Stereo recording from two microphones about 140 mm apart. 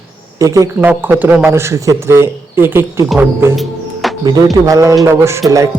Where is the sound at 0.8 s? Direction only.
10° right (ahead or behind).